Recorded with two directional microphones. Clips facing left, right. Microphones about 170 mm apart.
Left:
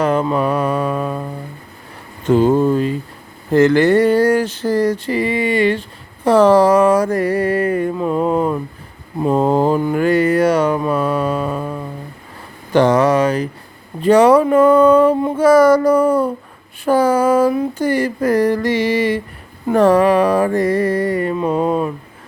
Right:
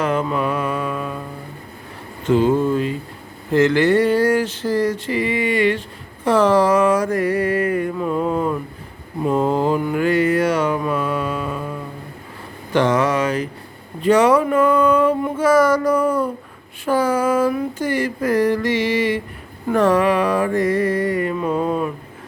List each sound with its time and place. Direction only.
0.0 s mantra: 35° left (ahead or behind)
2.3 s speech: 40° left (ahead or behind)
6.2 s a sound: 35° left (ahead or behind)
9.2 s mantra: 35° left (ahead or behind)
12.7 s speech: 35° left (ahead or behind)
14.0 s a sound: 35° left (ahead or behind)